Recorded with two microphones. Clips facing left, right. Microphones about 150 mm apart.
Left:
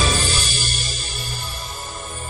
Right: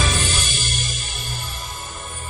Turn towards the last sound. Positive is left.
turn(degrees=35)  # may be behind; listen again after turning